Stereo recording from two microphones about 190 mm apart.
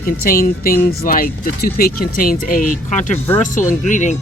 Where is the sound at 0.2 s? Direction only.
50° left (ahead or behind).